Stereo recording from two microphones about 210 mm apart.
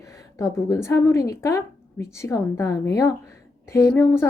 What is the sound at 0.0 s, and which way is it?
Speech, 15° left (ahead or behind).